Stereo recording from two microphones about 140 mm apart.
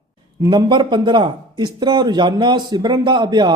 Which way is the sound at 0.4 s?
35° right (ahead or behind).